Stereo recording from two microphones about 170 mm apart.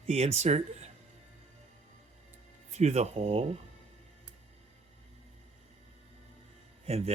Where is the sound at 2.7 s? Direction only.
40° right (ahead or behind).